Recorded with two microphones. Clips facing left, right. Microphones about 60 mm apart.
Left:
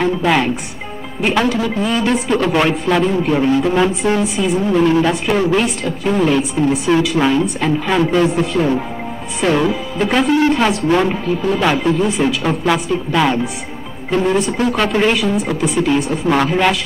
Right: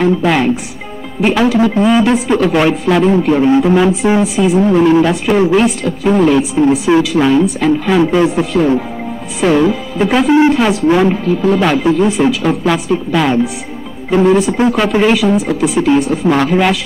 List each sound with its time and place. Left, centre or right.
0.0 s speech: centre
1.6 s speech: centre
2.1 s speech: centre